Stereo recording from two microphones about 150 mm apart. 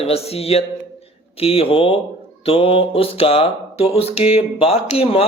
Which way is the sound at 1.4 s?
40° left (ahead or behind).